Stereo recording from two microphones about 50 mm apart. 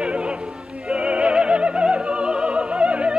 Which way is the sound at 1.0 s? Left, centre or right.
Centre.